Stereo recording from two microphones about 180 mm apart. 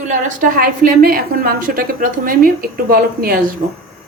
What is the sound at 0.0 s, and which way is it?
A woman's voice, 45° right (ahead or behind).